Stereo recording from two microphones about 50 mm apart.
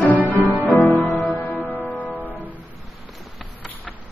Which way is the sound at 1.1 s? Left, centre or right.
Left.